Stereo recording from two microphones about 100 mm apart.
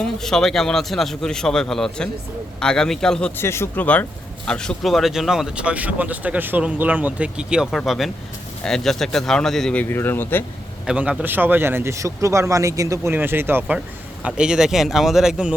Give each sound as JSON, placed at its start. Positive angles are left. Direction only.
{"t": 0.2, "sound": "a man's voice", "side_deg": 5}
{"t": 3.3, "sound": "a man's voice", "side_deg": 25}
{"t": 9.7, "sound": "speech", "side_deg": 20}
{"t": 10.8, "sound": "speech", "side_deg": -10}
{"t": 13.1, "sound": "speech", "side_deg": -20}
{"t": 13.7, "sound": "speech", "side_deg": -10}